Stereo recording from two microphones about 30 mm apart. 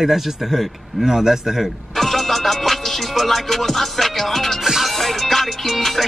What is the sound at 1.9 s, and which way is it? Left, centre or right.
Music, centre.